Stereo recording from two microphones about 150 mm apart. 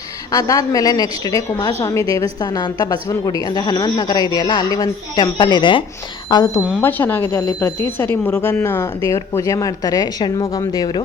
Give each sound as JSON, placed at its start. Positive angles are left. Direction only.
{"t": 0.3, "sound": "a woman's voice", "side_deg": 25}
{"t": 6.8, "sound": "a woman's voice", "side_deg": 15}